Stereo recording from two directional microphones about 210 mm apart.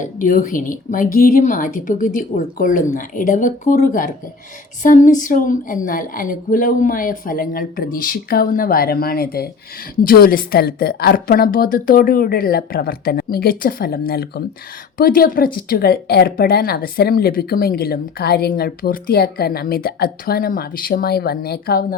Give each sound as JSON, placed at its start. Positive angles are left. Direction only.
{"t": 0.0, "sound": "a woman's voice", "side_deg": 40}